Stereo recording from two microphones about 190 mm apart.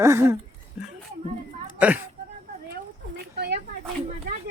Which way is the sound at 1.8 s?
10° right (ahead or behind).